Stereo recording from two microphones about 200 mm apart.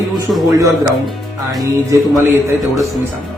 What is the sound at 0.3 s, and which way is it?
Speech, centre (ahead or behind).